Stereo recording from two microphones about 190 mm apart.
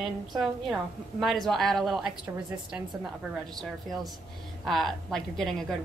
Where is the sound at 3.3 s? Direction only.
Centre (ahead or behind).